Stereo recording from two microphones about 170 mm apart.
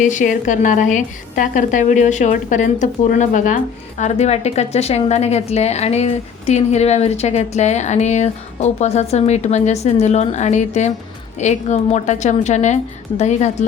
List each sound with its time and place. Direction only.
0.0 s a woman's voice: 45° left (ahead or behind)